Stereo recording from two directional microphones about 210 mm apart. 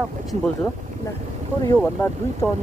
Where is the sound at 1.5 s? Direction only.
10° right (ahead or behind).